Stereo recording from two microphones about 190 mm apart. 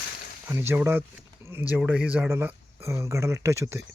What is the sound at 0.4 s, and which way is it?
Speech, 15° right (ahead or behind).